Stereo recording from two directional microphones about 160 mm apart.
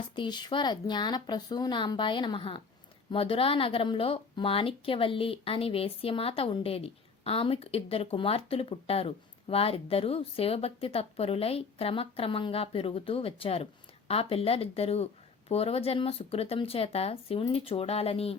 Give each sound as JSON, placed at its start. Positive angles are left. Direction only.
{"t": 0.2, "sound": "a woman's voice", "side_deg": 25}